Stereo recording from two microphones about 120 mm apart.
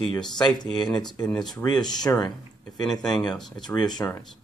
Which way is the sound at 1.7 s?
35° left (ahead or behind).